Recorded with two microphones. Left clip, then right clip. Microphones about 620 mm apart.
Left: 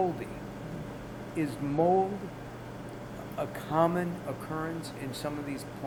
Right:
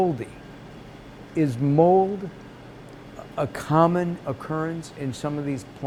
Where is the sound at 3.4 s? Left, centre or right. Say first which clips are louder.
Right 7 dB; right.